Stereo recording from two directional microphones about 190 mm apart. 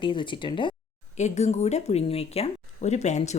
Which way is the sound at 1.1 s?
35° left (ahead or behind).